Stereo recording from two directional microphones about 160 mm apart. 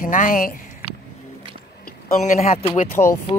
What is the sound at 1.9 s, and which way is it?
Speech, 45° left (ahead or behind).